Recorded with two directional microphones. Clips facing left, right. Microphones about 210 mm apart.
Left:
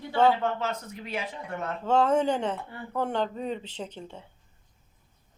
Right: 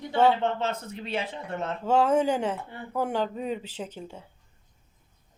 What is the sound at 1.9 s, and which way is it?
A woman's voice, 10° right (ahead or behind).